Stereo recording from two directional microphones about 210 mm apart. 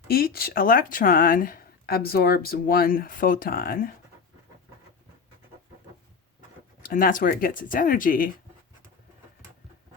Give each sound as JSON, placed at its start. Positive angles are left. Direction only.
{"t": 0.1, "sound": "speech", "side_deg": 45}
{"t": 6.8, "sound": "speech", "side_deg": 40}